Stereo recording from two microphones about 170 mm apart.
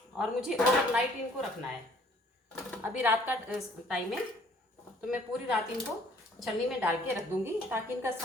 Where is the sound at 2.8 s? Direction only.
10° right (ahead or behind).